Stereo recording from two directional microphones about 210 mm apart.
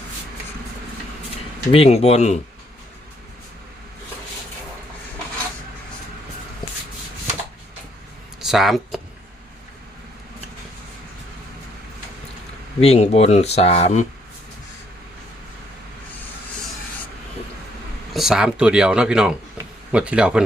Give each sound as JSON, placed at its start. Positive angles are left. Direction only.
{"t": 1.7, "sound": "speech", "side_deg": 30}
{"t": 8.4, "sound": "speech", "side_deg": 0}
{"t": 12.8, "sound": "speech", "side_deg": 30}
{"t": 18.1, "sound": "speech", "side_deg": 0}